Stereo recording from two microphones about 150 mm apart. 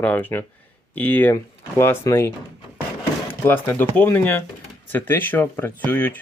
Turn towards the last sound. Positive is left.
turn(degrees=10)  # may be behind; listen again after turning